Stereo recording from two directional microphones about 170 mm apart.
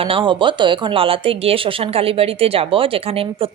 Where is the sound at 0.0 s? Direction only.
30° right (ahead or behind).